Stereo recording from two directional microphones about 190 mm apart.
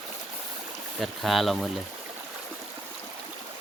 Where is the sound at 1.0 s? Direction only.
Centre (ahead or behind).